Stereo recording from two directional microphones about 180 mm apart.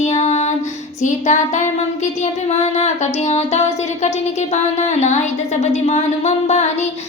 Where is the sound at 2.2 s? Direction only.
40° left (ahead or behind).